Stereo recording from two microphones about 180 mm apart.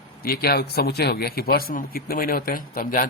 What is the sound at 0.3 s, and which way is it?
Speech, 55° left (ahead or behind).